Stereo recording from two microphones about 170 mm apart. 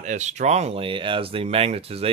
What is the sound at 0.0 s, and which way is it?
Speech, 45° right (ahead or behind).